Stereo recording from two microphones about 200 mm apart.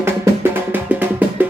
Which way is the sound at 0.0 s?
10° right (ahead or behind).